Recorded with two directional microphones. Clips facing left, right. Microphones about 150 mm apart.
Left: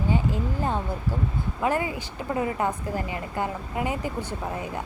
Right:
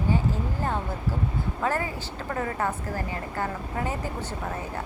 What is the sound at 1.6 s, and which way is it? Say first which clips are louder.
A woman's voice: left 3 dB; 15° left (ahead or behind).